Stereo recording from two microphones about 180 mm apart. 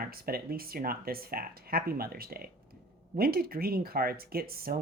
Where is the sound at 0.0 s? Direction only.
55° right (ahead or behind).